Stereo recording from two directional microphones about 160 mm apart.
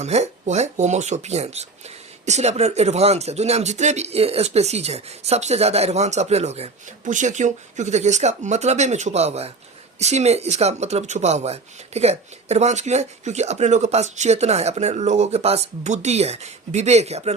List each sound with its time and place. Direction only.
0.0 s speech: 45° right (ahead or behind)